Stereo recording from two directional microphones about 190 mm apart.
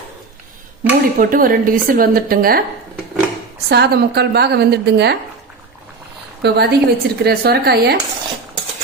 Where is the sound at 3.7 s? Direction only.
60° right (ahead or behind).